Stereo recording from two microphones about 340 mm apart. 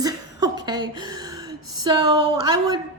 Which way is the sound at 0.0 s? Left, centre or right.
Centre.